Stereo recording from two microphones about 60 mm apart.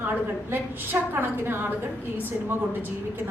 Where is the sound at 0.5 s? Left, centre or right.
Right.